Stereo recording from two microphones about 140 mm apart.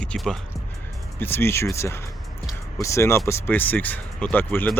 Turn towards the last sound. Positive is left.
turn(degrees=15)  # may be behind; listen again after turning